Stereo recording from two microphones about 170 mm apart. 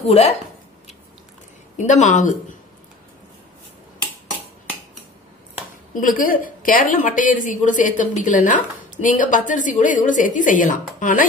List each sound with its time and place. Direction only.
0.0 s speech: 40° left (ahead or behind)
1.8 s a woman's voice: 45° left (ahead or behind)
5.9 s a woman's voice: 55° left (ahead or behind)